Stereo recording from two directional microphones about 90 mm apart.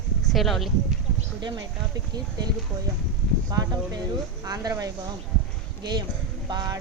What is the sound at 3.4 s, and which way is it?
Speech, 50° right (ahead or behind).